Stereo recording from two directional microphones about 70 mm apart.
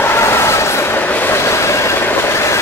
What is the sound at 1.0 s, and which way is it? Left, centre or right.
Train, left.